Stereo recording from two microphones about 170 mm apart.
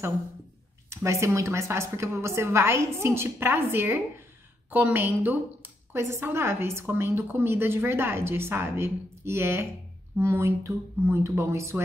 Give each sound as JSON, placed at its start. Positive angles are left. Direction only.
{"t": 0.8, "sound": "a woman's voice", "side_deg": -15}